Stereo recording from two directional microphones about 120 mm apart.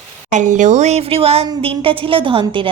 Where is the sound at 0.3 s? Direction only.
90° right.